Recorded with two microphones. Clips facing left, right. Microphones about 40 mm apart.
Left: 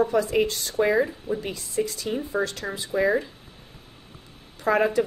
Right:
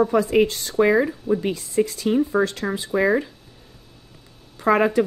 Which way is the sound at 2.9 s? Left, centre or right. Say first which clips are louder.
Right 2 dB; right.